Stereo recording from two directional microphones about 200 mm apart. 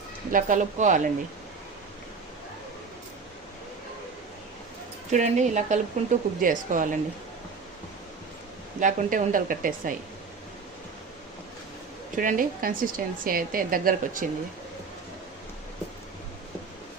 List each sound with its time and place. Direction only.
0.3 s speech: 40° right (ahead or behind)
5.1 s speech: 35° right (ahead or behind)
8.8 s a woman's voice: 40° right (ahead or behind)
12.1 s a woman's voice: 45° right (ahead or behind)